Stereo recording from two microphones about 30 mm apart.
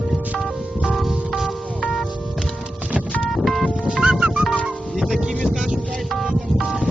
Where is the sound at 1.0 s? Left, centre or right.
Centre.